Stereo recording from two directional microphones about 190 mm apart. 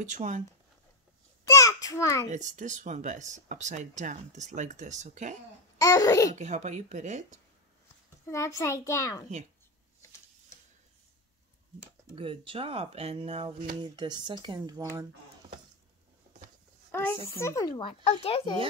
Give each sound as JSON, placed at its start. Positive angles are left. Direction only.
{"t": 0.0, "sound": "speech", "side_deg": -40}
{"t": 1.5, "sound": "a sound", "side_deg": 20}
{"t": 2.2, "sound": "speech", "side_deg": -40}
{"t": 5.8, "sound": "speech", "side_deg": 20}
{"t": 6.3, "sound": "speech", "side_deg": -40}
{"t": 8.3, "sound": "a child's voice", "side_deg": 15}
{"t": 12.2, "sound": "speech", "side_deg": -30}
{"t": 16.9, "sound": "a sound", "side_deg": 10}
{"t": 17.4, "sound": "speech", "side_deg": 15}